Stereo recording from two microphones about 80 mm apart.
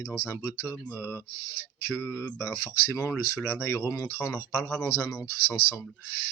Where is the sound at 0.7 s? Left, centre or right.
Right.